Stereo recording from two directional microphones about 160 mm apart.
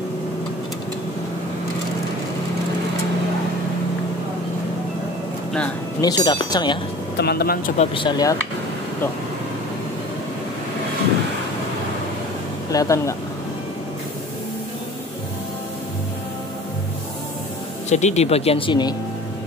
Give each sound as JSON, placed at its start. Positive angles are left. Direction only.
{"t": 5.9, "sound": "speech", "side_deg": 25}
{"t": 7.2, "sound": "speech", "side_deg": 85}
{"t": 7.7, "sound": "speech", "side_deg": 40}
{"t": 12.7, "sound": "speech", "side_deg": 20}
{"t": 17.8, "sound": "speech", "side_deg": 45}